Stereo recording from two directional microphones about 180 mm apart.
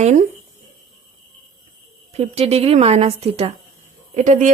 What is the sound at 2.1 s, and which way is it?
A woman's voice, 35° right (ahead or behind).